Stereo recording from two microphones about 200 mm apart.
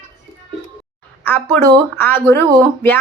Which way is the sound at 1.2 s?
10° left (ahead or behind).